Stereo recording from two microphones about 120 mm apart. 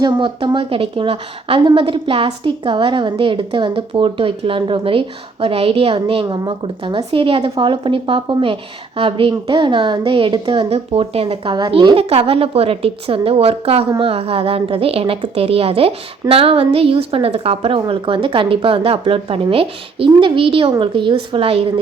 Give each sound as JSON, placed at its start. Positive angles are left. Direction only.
{"t": 0.0, "sound": "a woman's voice", "side_deg": -40}
{"t": 6.2, "sound": "a woman's voice", "side_deg": -40}
{"t": 11.7, "sound": "a woman's voice", "side_deg": -40}
{"t": 11.9, "sound": "a woman's voice", "side_deg": -55}